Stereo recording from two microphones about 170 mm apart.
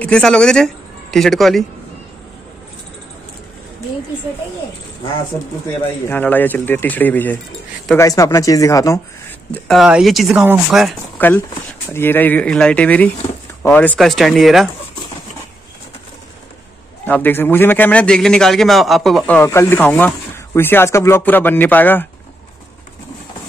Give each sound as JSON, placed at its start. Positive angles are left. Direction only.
{"t": 0.0, "sound": "speech", "side_deg": 5}
{"t": 6.0, "sound": "a man's voice", "side_deg": 10}
{"t": 9.5, "sound": "speech", "side_deg": 0}
{"t": 11.1, "sound": "a man's voice", "side_deg": 10}
{"t": 17.0, "sound": "a man's voice", "side_deg": 10}